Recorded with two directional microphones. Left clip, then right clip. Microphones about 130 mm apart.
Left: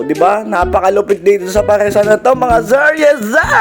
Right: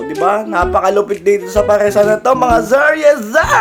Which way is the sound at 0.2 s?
45° left (ahead or behind).